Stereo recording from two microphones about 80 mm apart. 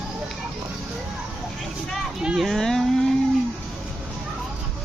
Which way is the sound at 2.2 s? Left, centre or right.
Centre.